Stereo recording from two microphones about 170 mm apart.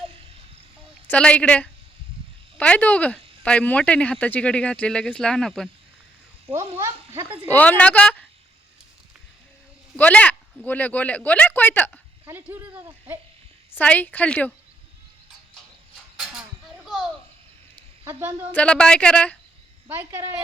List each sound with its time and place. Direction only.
1.0 s speech: 5° left (ahead or behind)
6.7 s speech: 15° right (ahead or behind)
7.5 s speech: 10° left (ahead or behind)
9.9 s speech: 5° left (ahead or behind)
12.2 s speech: 15° right (ahead or behind)
13.7 s speech: 10° left (ahead or behind)
16.1 s a sound: 5° right (ahead or behind)
18.5 s speech: 5° left (ahead or behind)
19.9 s speech: 15° right (ahead or behind)